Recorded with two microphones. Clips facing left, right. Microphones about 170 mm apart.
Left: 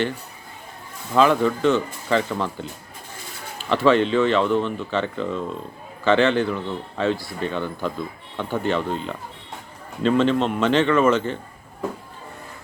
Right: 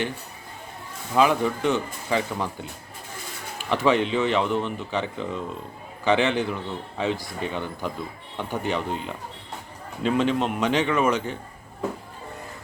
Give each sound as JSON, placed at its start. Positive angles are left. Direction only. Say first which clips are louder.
{"t": 1.1, "sound": "speech", "louder": "left 3 dB", "side_deg": -10}